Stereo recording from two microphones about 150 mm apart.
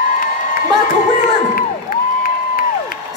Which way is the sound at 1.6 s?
75° left (ahead or behind).